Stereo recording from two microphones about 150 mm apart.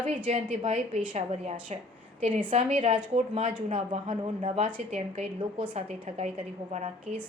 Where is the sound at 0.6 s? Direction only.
45° right (ahead or behind).